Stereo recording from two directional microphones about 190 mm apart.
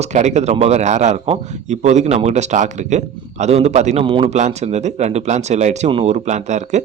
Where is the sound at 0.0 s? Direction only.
35° right (ahead or behind).